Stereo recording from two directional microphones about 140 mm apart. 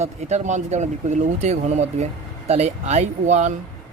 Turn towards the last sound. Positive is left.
turn(degrees=-55)  # may be behind; listen again after turning